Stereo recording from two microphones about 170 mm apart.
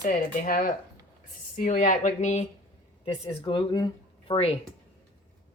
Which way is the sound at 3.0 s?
30° left (ahead or behind).